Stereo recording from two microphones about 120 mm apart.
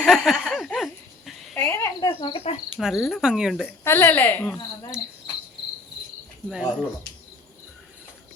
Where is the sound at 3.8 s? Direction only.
20° left (ahead or behind).